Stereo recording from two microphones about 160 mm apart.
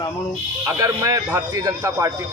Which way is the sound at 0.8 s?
20° right (ahead or behind).